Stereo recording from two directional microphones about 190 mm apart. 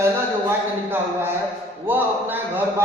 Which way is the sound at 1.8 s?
10° right (ahead or behind).